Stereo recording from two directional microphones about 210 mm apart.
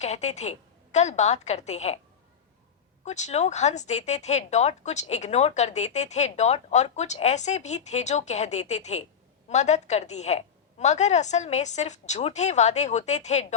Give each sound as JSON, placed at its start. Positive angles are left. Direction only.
{"t": 0.0, "sound": "a woman's voice", "side_deg": 35}
{"t": 3.0, "sound": "a woman's voice", "side_deg": 35}